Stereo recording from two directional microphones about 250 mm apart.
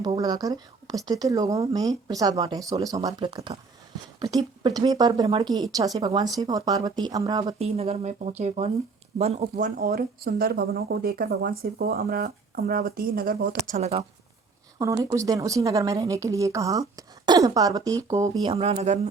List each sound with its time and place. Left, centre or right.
0.0 s a woman's voice: centre; by 13.6 s right
13.7 s speech: right
14.8 s a woman's voice: centre
18.4 s speech: right